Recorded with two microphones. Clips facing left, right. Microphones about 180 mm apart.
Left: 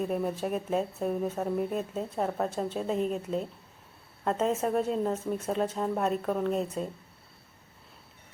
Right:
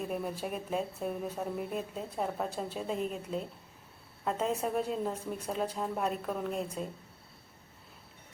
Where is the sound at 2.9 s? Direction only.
40° left (ahead or behind).